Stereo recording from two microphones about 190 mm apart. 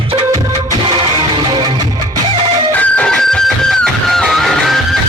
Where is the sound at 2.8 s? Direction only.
5° left (ahead or behind).